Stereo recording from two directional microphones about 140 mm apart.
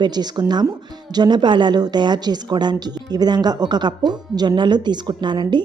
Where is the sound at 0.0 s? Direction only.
30° right (ahead or behind).